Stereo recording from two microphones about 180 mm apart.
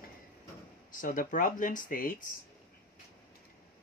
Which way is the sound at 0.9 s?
50° left (ahead or behind).